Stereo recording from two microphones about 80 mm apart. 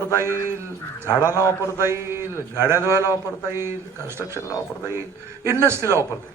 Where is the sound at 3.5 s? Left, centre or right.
Right.